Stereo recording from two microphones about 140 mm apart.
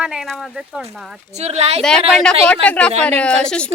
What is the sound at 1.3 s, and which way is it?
Speech, 50° right (ahead or behind).